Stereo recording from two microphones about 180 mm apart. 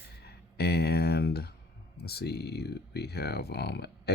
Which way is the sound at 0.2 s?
65° left (ahead or behind).